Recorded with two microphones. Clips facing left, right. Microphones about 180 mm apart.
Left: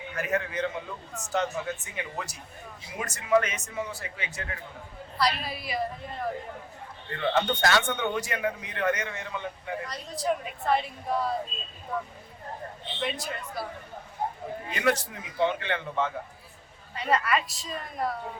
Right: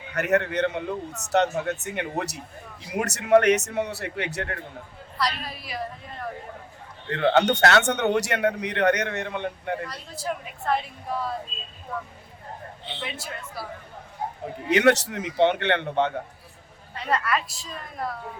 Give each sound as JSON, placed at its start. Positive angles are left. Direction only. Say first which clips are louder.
{"t": 0.1, "sound": "speech", "louder": "right 7 dB", "side_deg": -70}
{"t": 5.1, "sound": "a woman's voice", "louder": "left 1 dB", "side_deg": 0}
{"t": 7.1, "sound": "speech", "louder": "right 6 dB", "side_deg": -65}
{"t": 9.8, "sound": "a woman's voice", "louder": "left 2 dB", "side_deg": 0}
{"t": 14.7, "sound": "speech", "louder": "right 8 dB", "side_deg": -75}
{"t": 16.9, "sound": "a woman's voice", "louder": "even", "side_deg": 0}